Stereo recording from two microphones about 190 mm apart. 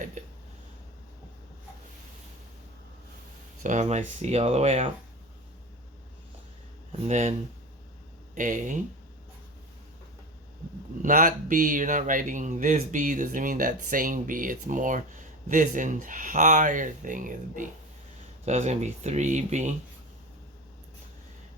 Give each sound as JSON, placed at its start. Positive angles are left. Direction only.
{"t": 0.2, "sound": "a sound", "side_deg": -40}
{"t": 3.6, "sound": "speech", "side_deg": -40}
{"t": 7.1, "sound": "speech", "side_deg": -35}
{"t": 8.4, "sound": "speech", "side_deg": -40}
{"t": 11.0, "sound": "speech", "side_deg": -45}